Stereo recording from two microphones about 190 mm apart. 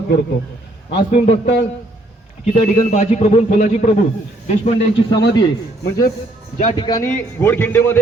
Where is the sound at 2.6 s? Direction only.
35° left (ahead or behind).